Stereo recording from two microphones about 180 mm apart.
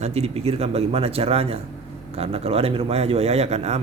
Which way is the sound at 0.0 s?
35° right (ahead or behind).